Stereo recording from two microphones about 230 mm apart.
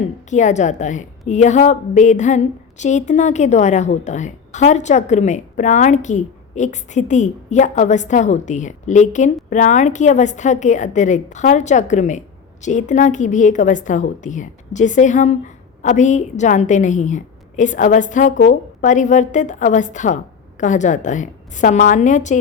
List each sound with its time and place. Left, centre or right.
0.3 s speech: left